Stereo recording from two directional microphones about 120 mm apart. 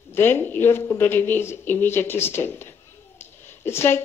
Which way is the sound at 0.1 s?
20° left (ahead or behind).